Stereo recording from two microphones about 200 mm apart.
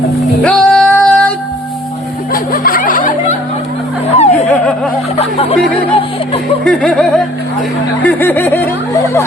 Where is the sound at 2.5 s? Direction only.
45° left (ahead or behind).